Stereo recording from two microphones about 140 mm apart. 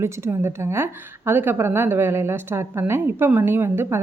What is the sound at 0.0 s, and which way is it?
A woman's voice, 20° right (ahead or behind).